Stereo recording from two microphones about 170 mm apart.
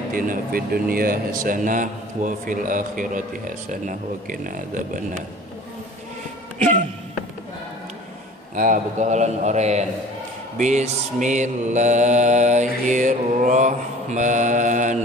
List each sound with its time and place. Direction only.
0.1 s speech: 55° right (ahead or behind)
8.5 s speech: 50° right (ahead or behind)